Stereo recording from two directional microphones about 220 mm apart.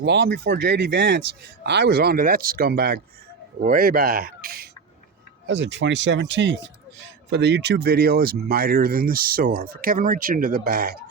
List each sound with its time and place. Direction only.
0.0 s speech: 50° right (ahead or behind)
5.5 s speech: 55° right (ahead or behind)